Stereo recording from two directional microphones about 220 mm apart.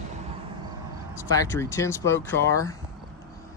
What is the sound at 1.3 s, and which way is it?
Speech, 15° left (ahead or behind).